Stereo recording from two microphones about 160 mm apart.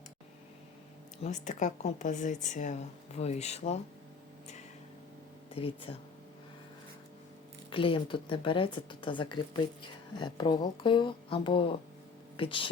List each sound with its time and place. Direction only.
1.2 s a woman's voice: 50° left (ahead or behind)
5.5 s speech: 35° left (ahead or behind)
7.7 s speech: 35° left (ahead or behind)